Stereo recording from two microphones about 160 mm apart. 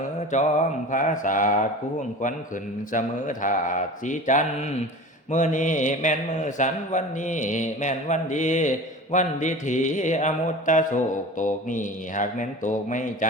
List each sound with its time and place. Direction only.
0.3 s mantra: 45° left (ahead or behind)